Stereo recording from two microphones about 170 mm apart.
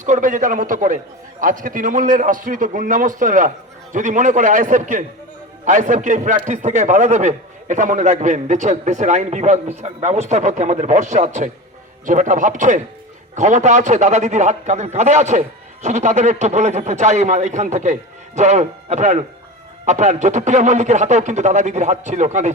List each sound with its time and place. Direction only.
0.0 s a man's voice: 50° right (ahead or behind)